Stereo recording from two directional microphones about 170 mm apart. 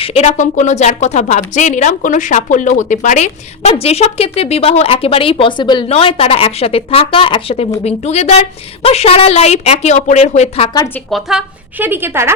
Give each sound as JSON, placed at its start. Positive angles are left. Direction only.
{"t": 0.0, "sound": "a woman's voice", "side_deg": 35}
{"t": 10.8, "sound": "speech", "side_deg": 15}
{"t": 11.1, "sound": "a woman's voice", "side_deg": -5}